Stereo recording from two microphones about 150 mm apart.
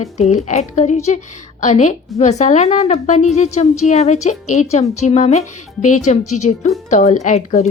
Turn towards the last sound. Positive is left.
turn(degrees=50)  # may be behind; listen again after turning